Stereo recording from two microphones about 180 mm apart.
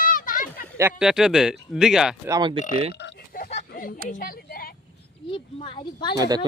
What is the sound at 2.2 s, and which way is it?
Speech, 20° right (ahead or behind).